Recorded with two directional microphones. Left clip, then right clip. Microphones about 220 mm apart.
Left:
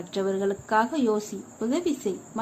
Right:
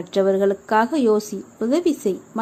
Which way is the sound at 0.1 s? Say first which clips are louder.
Right 9 dB; 25° right (ahead or behind).